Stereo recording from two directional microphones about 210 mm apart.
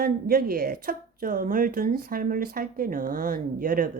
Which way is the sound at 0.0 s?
45° right (ahead or behind).